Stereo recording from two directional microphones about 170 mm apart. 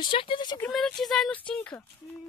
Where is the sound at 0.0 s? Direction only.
30° left (ahead or behind).